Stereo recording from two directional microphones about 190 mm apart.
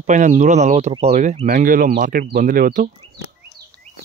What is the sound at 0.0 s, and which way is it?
Speech, 40° right (ahead or behind).